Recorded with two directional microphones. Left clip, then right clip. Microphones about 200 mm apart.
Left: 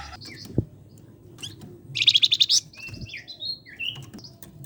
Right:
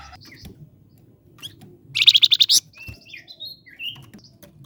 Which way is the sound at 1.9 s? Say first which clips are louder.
Right 5 dB; 35° right (ahead or behind).